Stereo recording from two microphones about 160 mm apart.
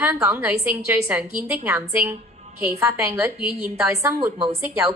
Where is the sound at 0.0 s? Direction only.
10° right (ahead or behind).